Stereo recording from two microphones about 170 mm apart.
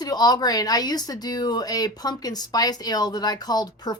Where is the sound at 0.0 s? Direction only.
25° left (ahead or behind).